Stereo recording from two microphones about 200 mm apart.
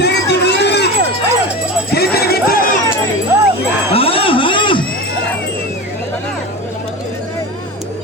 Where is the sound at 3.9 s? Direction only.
30° left (ahead or behind).